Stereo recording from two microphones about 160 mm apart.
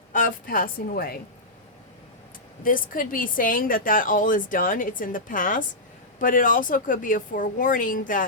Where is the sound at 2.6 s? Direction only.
60° left (ahead or behind).